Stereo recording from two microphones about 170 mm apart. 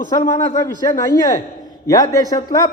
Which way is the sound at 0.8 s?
20° left (ahead or behind).